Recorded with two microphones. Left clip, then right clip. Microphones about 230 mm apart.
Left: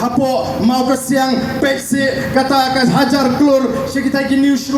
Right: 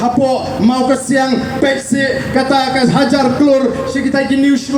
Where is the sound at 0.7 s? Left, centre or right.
Right.